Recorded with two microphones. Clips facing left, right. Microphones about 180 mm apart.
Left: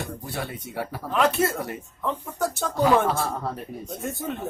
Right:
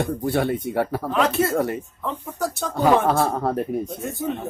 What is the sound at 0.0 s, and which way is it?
Speech, 55° right (ahead or behind).